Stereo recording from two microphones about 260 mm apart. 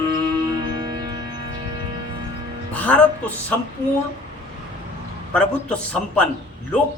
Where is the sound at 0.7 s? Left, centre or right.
Centre.